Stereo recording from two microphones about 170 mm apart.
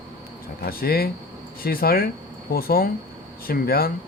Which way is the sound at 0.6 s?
65° left (ahead or behind).